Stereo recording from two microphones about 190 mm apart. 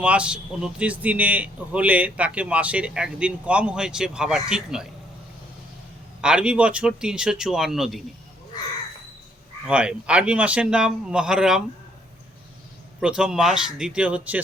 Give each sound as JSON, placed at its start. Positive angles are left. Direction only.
{"t": 0.0, "sound": "speech", "side_deg": -5}
{"t": 6.2, "sound": "a man's voice", "side_deg": -5}
{"t": 9.6, "sound": "a man's voice", "side_deg": -5}
{"t": 13.0, "sound": "a man's voice", "side_deg": -5}